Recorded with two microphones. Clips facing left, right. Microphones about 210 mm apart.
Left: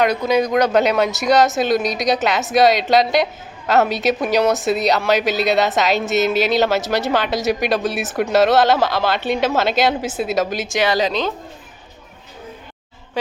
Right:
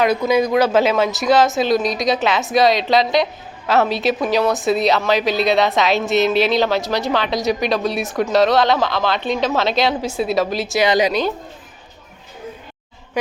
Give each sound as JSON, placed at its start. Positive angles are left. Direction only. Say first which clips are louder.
{"t": 0.0, "sound": "a woman's voice", "louder": "right 1 dB", "side_deg": -10}
{"t": 10.8, "sound": "a woman's voice", "louder": "right 2 dB", "side_deg": -15}